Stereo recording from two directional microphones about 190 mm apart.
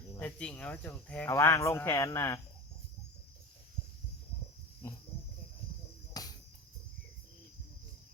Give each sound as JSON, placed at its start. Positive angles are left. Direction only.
{"t": 0.1, "sound": "speech", "side_deg": 10}
{"t": 4.8, "sound": "speech", "side_deg": 15}
{"t": 6.2, "sound": "cricket", "side_deg": 20}